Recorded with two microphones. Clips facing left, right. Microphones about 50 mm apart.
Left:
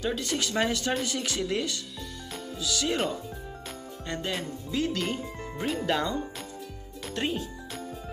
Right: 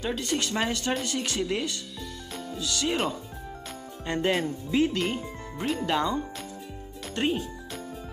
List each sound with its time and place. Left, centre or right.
0.0 s speech: centre
4.1 s speech: centre
7.2 s music: centre